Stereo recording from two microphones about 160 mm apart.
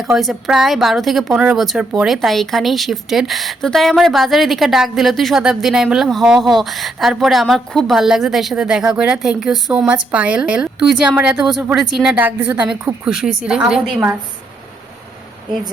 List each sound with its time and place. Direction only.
0.0 s a woman's voice: centre (ahead or behind)